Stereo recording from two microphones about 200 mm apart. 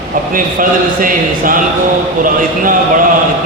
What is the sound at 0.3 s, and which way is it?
A man's voice, 45° right (ahead or behind).